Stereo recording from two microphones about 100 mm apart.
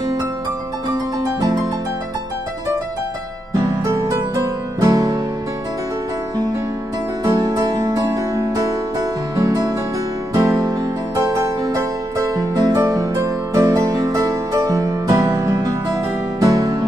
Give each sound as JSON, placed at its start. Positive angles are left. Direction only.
{"t": 3.5, "sound": "music", "side_deg": -30}
{"t": 7.2, "sound": "music", "side_deg": -35}
{"t": 12.4, "sound": "music", "side_deg": -40}